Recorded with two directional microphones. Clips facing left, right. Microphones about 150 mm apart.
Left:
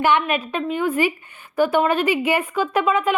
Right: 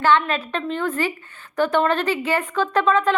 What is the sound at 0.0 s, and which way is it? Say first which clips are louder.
A woman's voice: even; 15° left (ahead or behind).